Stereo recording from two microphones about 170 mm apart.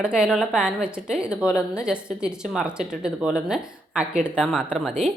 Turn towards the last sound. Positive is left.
turn(degrees=0)  # may be behind; listen again after turning